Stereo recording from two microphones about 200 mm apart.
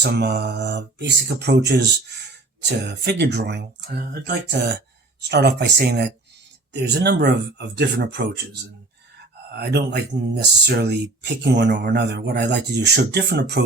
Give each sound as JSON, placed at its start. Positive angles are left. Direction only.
{"t": 0.0, "sound": "speech", "side_deg": -55}